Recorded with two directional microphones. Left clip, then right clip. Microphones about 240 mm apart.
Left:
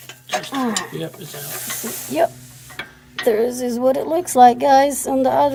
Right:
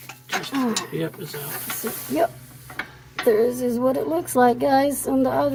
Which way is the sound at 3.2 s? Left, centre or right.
Left.